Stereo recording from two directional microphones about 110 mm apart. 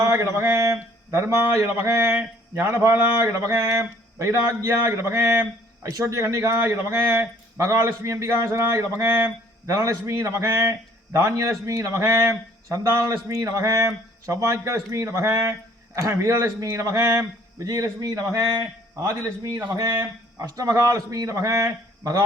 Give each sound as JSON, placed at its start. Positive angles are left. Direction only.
{"t": 0.0, "sound": "a man's voice", "side_deg": -25}
{"t": 19.0, "sound": "a man's voice", "side_deg": -25}
{"t": 19.7, "sound": "a man's voice", "side_deg": -35}